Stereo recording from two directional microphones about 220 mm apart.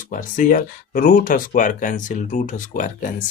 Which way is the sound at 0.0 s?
35° left (ahead or behind).